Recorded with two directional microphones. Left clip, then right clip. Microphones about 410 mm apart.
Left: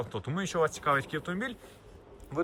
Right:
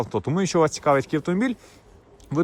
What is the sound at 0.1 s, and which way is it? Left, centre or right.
Speech, centre.